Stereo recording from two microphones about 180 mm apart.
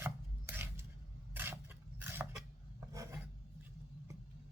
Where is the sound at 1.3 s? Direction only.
10° right (ahead or behind).